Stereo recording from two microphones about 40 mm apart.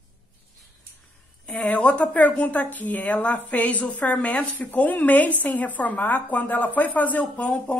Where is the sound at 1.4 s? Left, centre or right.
Left.